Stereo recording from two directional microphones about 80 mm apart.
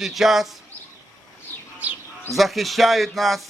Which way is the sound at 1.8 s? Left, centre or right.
Centre.